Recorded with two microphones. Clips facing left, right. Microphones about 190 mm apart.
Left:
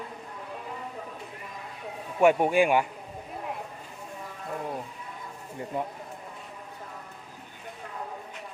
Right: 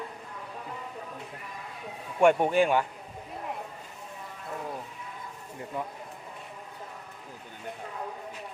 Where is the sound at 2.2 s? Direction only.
5° left (ahead or behind).